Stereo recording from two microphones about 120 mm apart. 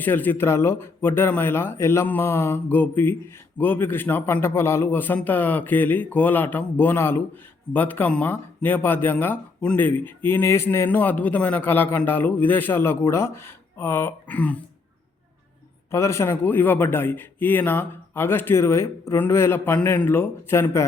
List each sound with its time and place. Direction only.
0.0 s speech: 15° left (ahead or behind)
15.9 s speech: 25° left (ahead or behind)